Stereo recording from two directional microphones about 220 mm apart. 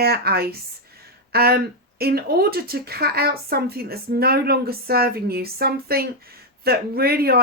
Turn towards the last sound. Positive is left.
turn(degrees=-45)  # may be behind; listen again after turning